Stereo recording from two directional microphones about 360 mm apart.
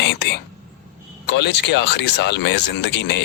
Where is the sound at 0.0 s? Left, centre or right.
Left.